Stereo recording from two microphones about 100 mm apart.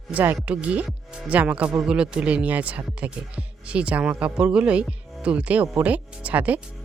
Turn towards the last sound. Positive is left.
turn(degrees=-15)  # may be behind; listen again after turning